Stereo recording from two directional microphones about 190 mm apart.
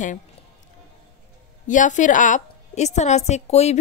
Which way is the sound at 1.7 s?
40° left (ahead or behind).